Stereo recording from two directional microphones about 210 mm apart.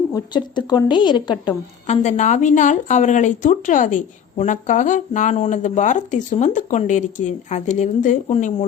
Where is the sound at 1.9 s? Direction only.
35° left (ahead or behind).